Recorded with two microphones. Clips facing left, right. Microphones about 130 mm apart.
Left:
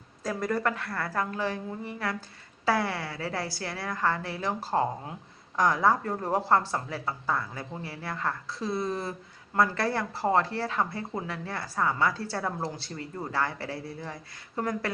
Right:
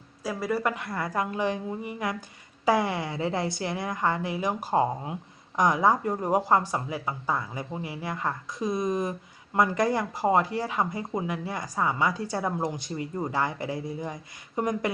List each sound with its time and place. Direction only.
0.2 s speech: 5° right (ahead or behind)